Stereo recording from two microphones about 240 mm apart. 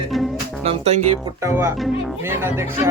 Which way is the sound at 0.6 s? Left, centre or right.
Right.